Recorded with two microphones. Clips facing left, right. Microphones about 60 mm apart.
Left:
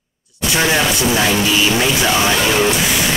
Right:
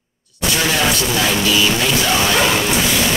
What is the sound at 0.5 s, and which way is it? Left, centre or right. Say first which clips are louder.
Speech: left 2 dB; left.